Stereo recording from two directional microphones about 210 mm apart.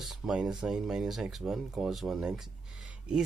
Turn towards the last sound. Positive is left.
turn(degrees=-5)  # may be behind; listen again after turning